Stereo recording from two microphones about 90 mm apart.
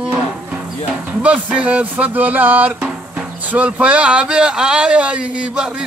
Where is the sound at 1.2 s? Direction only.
15° right (ahead or behind).